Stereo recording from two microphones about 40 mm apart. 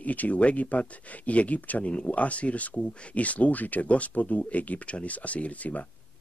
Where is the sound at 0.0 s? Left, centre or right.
Left.